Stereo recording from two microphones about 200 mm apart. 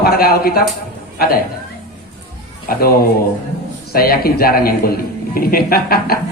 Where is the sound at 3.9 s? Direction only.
50° left (ahead or behind).